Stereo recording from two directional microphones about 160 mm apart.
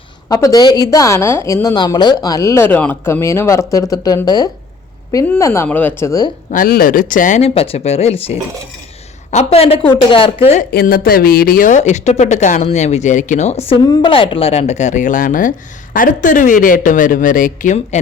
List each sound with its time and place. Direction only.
0.3 s a woman's voice: 20° left (ahead or behind)
6.0 s a woman's voice: 20° left (ahead or behind)
6.5 s a woman's voice: 65° left (ahead or behind); by 10.6 s 35° left (ahead or behind)
10.6 s speech: 70° left (ahead or behind); by 13.7 s 40° left (ahead or behind)
13.8 s speech: 25° left (ahead or behind); by 18.0 s 50° left (ahead or behind)